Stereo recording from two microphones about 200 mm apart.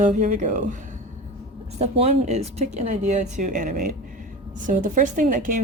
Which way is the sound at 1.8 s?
30° right (ahead or behind).